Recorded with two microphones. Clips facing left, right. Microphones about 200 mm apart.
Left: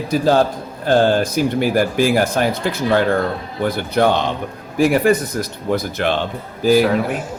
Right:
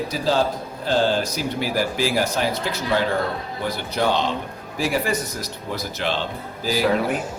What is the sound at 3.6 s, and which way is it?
Speech, 55° left (ahead or behind).